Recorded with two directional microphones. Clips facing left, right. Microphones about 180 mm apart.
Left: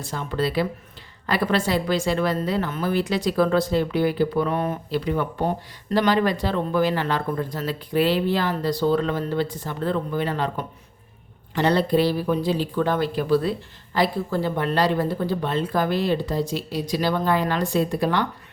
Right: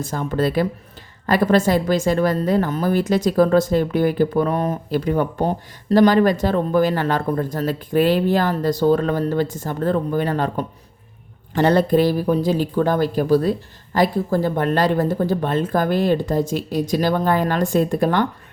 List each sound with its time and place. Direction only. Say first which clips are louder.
0.0 s speech: right 5 dB; 45° right (ahead or behind)